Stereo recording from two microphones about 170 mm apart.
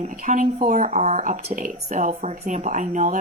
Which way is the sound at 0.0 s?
50° right (ahead or behind).